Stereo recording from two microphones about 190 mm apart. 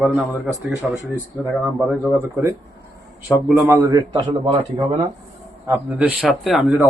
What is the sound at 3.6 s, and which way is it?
A man's voice, 15° right (ahead or behind).